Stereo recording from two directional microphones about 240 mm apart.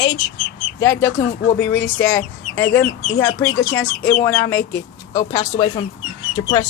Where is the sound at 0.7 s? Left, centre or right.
Centre.